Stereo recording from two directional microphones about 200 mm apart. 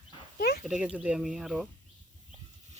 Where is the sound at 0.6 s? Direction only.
5° right (ahead or behind).